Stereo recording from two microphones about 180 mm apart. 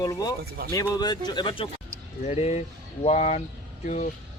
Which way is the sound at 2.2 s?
40° left (ahead or behind).